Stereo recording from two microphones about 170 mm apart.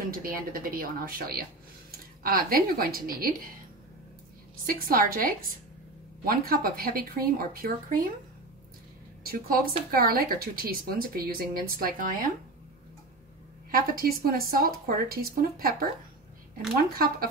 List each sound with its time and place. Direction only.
0.0 s speech: 55° right (ahead or behind)
4.6 s speech: 60° right (ahead or behind)
9.2 s speech: 60° right (ahead or behind)
13.7 s speech: 60° right (ahead or behind)
16.9 s speech: 60° right (ahead or behind)